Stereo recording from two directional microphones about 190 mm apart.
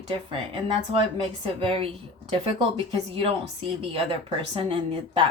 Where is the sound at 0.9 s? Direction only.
25° right (ahead or behind).